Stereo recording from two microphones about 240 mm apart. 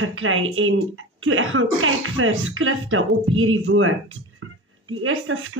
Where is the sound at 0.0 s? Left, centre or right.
Right.